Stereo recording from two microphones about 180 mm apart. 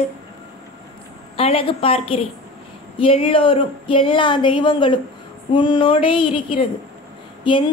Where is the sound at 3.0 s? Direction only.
30° left (ahead or behind).